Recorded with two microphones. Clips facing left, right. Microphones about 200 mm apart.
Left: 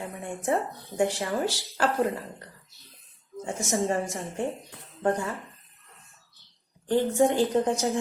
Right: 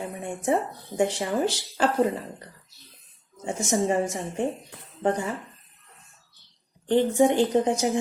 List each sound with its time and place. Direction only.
0.2 s a sound: 20° right (ahead or behind)
0.9 s a woman's voice: 20° right (ahead or behind)
3.4 s a woman's voice: 15° right (ahead or behind)
6.8 s a woman's voice: 15° right (ahead or behind)